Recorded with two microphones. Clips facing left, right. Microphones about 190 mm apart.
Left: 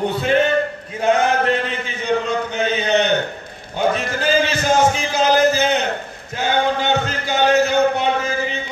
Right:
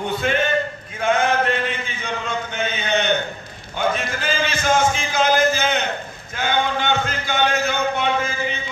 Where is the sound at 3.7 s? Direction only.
35° left (ahead or behind).